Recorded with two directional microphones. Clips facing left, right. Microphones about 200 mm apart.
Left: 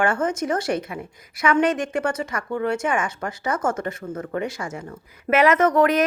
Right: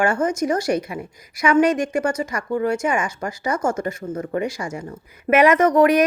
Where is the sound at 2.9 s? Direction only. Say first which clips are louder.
Right 1 dB; 10° right (ahead or behind).